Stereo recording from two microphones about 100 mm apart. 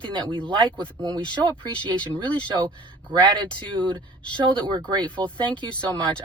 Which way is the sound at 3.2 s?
50° right (ahead or behind).